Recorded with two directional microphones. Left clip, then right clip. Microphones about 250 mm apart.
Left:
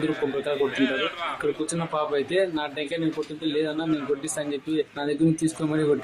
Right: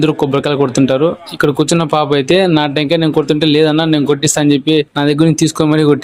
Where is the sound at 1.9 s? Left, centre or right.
Right.